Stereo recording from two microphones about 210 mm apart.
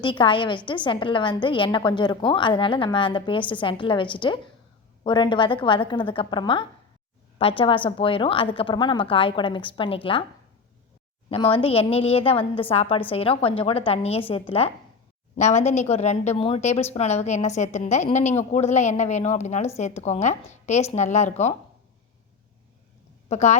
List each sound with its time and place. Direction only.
0.0 s a woman's voice: 25° left (ahead or behind)
11.3 s a woman's voice: 25° left (ahead or behind)
23.3 s a woman's voice: 35° left (ahead or behind)